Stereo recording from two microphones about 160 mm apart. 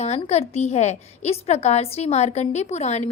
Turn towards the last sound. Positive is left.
turn(degrees=45)  # may be behind; listen again after turning